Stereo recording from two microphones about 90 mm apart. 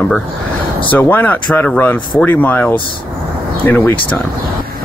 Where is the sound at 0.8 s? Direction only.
20° left (ahead or behind).